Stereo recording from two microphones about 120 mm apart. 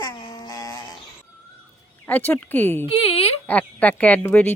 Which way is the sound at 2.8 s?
55° left (ahead or behind).